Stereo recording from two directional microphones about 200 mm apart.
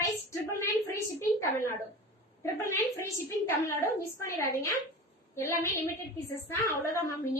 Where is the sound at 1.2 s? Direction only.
15° left (ahead or behind).